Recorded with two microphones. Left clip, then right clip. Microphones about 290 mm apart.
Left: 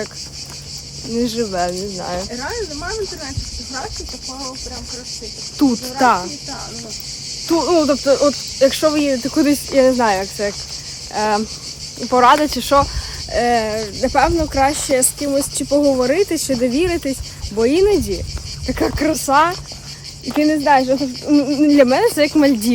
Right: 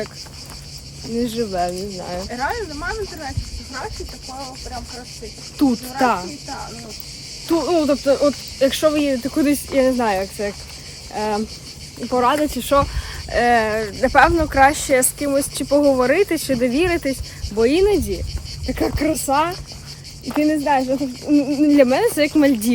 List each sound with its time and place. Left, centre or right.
1.2 s speech: centre
5.5 s speech: centre
7.4 s speech: centre